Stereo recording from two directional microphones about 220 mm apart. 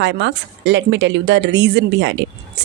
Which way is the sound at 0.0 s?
55° right (ahead or behind).